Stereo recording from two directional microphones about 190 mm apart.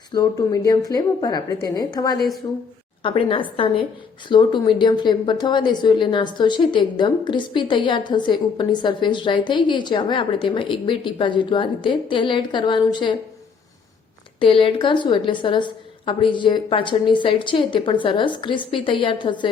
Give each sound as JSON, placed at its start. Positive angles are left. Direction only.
{"t": 0.1, "sound": "a woman's voice", "side_deg": 20}
{"t": 14.3, "sound": "a woman's voice", "side_deg": 25}